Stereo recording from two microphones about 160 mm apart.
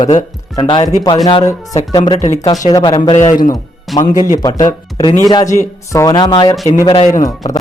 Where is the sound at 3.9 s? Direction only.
Centre (ahead or behind).